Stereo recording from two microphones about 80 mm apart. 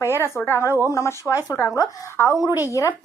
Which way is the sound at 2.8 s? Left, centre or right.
Left.